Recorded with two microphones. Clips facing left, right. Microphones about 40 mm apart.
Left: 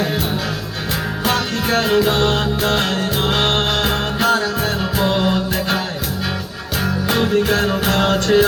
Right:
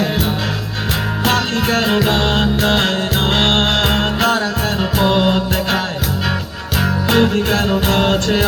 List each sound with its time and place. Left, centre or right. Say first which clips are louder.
1.2 s music: right 3 dB; right
2.2 s music: right 2 dB; right
7.9 s music: left 1 dB; right